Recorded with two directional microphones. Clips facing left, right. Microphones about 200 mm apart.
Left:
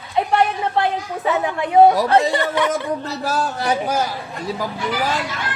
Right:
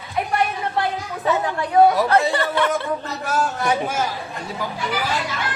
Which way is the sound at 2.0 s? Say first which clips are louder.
Left 2 dB; 30° left (ahead or behind).